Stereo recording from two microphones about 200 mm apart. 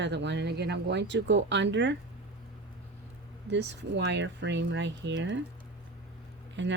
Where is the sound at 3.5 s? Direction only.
60° right (ahead or behind).